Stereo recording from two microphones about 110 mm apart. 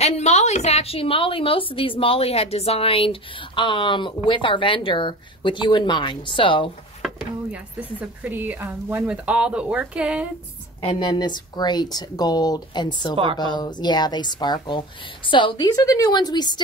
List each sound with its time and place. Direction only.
0.0 s a woman's voice: 90° left; by 6.7 s 50° left (ahead or behind)
7.0 s a sound: centre (ahead or behind)
7.5 s a woman's voice: 10° right (ahead or behind)
10.8 s speech: 50° left (ahead or behind)
13.1 s a woman's voice: 50° right (ahead or behind)
13.4 s speech: 40° left (ahead or behind)
15.7 s speech: 35° left (ahead or behind)